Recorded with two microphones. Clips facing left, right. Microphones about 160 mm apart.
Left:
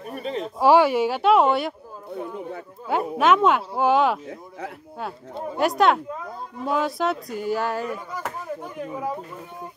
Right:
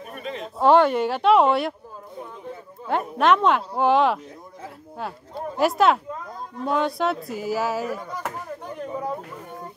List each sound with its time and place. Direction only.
0.1 s a sound: 35° left (ahead or behind)
0.6 s a woman's voice: 5° left (ahead or behind)
2.9 s a woman's voice: 5° left (ahead or behind)
4.3 s speech: 75° left (ahead or behind)
5.6 s a woman's voice: centre (ahead or behind)
8.7 s a sound: 5° left (ahead or behind)